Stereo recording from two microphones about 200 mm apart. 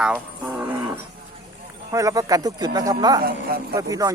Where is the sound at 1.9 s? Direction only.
15° right (ahead or behind).